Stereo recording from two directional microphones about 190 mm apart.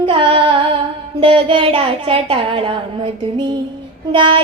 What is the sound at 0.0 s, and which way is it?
Female singing, 30° right (ahead or behind).